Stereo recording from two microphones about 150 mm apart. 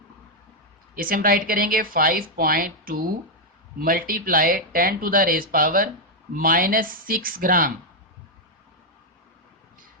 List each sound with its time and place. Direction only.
0.9 s speech: 70° right (ahead or behind)